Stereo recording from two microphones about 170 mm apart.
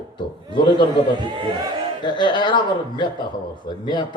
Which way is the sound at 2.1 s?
25° left (ahead or behind).